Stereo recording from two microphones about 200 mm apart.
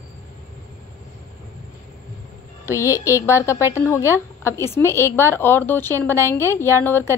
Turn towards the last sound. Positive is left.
turn(degrees=10)  # may be behind; listen again after turning